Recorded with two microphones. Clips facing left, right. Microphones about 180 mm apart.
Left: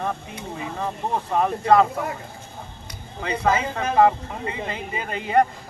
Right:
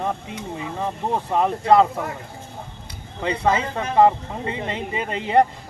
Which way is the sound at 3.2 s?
30° right (ahead or behind).